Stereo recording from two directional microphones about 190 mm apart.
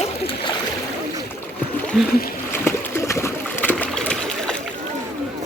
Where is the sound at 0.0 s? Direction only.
25° left (ahead or behind).